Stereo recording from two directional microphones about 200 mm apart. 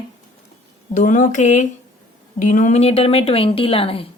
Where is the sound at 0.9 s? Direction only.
40° left (ahead or behind).